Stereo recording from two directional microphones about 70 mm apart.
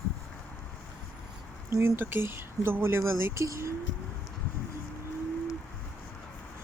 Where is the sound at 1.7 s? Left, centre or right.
Right.